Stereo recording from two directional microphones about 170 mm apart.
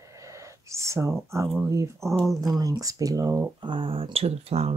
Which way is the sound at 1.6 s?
20° right (ahead or behind).